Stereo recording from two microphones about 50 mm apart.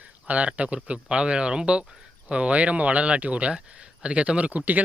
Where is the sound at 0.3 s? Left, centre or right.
Right.